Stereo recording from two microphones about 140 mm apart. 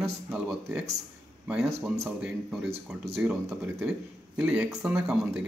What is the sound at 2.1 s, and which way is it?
Speech, 5° right (ahead or behind).